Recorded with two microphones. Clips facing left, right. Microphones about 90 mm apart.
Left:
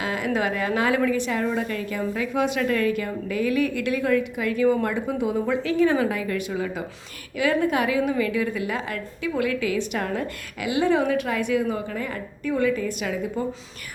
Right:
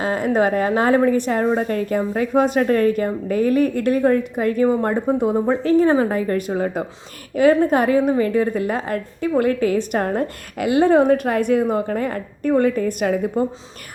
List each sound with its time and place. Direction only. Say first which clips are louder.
0.0 s a woman's voice: right 6 dB; 40° right (ahead or behind)